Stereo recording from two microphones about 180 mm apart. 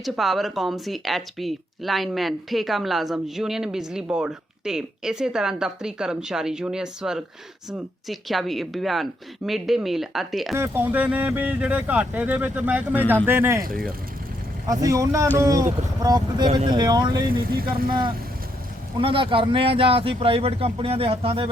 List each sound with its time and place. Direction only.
0.0 s speech: centre (ahead or behind)
10.5 s speech: 10° right (ahead or behind)
13.7 s speech: 55° right (ahead or behind)
14.7 s speech: 20° right (ahead or behind)
17.4 s speech: 55° right (ahead or behind)
18.9 s a man's voice: 30° right (ahead or behind)